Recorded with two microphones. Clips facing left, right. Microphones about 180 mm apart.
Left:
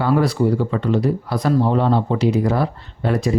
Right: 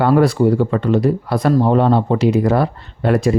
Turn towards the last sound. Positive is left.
turn(degrees=-60)  # may be behind; listen again after turning